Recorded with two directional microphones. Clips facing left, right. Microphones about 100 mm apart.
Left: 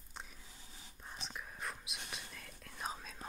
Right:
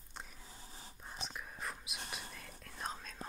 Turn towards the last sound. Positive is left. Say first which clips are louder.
# even
turn(degrees=5)  # may be behind; listen again after turning